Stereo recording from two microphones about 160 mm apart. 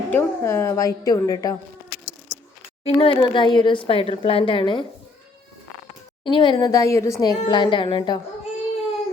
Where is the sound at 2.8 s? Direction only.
35° left (ahead or behind).